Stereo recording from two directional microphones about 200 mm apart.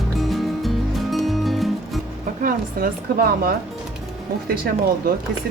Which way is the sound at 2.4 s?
45° right (ahead or behind).